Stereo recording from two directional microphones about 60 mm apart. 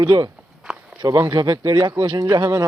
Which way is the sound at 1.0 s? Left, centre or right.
Right.